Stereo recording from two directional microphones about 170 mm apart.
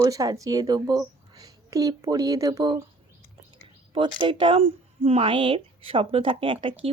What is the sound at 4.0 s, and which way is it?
Speech, 30° right (ahead or behind).